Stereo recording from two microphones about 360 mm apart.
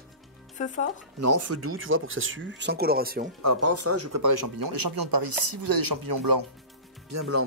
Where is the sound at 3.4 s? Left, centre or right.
Right.